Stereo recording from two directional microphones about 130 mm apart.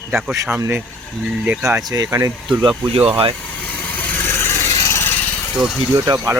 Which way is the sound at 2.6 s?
40° right (ahead or behind).